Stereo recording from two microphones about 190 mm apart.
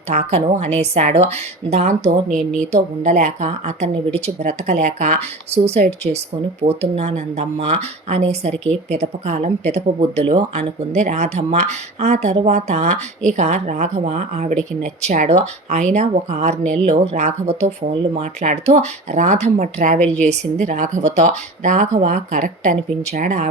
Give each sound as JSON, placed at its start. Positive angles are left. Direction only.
{"t": 0.1, "sound": "speech", "side_deg": -35}